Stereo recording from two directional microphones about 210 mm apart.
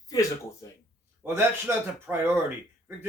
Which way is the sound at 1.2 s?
10° right (ahead or behind).